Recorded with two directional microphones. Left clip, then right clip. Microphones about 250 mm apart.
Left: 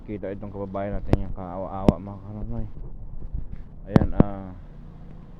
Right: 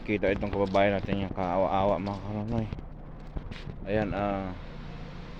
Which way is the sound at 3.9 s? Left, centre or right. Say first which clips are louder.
Left 4 dB; centre.